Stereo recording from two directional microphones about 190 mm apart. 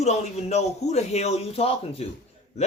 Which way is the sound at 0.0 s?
35° left (ahead or behind).